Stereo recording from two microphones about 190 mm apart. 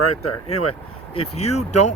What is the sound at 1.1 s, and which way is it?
Speech, 35° left (ahead or behind).